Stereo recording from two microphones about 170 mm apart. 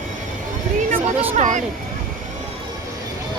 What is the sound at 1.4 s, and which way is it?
Speech, 45° right (ahead or behind).